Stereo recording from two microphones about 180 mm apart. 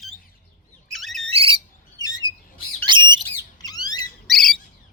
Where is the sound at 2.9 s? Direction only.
25° right (ahead or behind).